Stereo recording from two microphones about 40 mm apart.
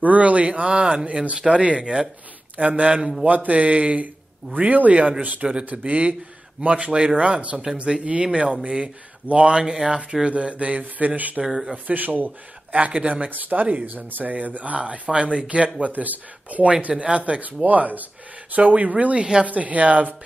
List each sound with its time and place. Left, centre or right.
0.0 s speech: right
3.0 s speech: centre
3.3 s speech: right
9.6 s speech: centre
10.2 s speech: right
11.4 s speech: centre
11.9 s speech: right
12.7 s speech: right
15.9 s speech: right